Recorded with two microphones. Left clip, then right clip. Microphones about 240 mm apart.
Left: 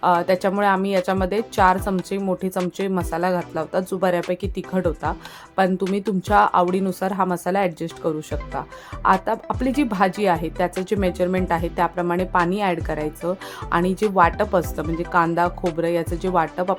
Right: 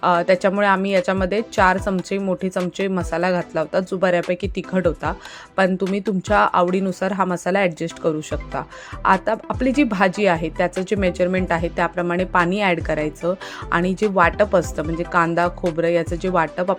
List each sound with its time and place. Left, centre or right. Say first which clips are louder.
0.0 s speech: right 2 dB; centre